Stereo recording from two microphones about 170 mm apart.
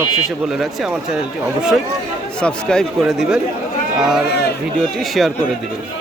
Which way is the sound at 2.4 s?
5° left (ahead or behind).